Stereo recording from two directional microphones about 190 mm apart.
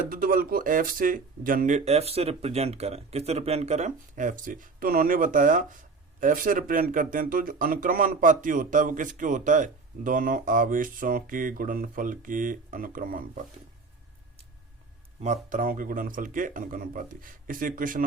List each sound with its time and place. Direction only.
0.0 s speech: 50° right (ahead or behind)
15.2 s speech: 40° right (ahead or behind)